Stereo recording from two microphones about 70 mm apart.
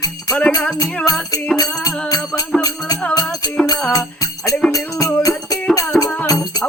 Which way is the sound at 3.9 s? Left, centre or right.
Left.